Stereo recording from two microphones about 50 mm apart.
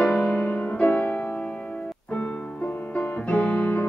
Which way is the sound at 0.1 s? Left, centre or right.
Left.